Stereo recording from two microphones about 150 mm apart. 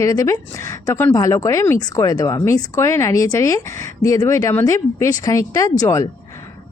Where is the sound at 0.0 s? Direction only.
20° left (ahead or behind).